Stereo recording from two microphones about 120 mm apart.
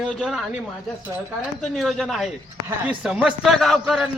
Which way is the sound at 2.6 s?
10° right (ahead or behind).